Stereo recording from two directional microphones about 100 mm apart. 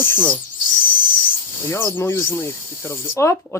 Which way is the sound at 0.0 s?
20° left (ahead or behind).